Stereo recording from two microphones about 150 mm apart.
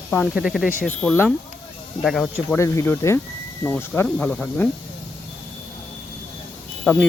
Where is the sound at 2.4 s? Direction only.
20° left (ahead or behind).